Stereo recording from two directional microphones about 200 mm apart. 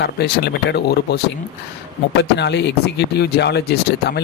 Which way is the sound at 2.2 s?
60° left (ahead or behind).